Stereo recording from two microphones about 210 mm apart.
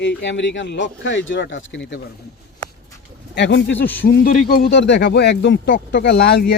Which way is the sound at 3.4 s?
60° left (ahead or behind).